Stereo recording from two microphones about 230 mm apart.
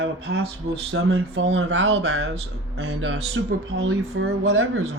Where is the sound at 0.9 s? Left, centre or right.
Right.